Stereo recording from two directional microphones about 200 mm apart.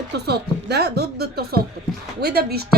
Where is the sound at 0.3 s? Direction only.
55° right (ahead or behind).